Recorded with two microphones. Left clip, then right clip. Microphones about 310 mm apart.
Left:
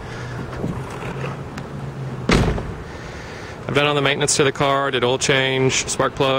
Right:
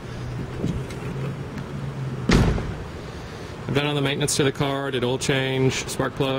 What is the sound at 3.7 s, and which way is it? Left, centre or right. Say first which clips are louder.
Speech: left 6 dB; centre.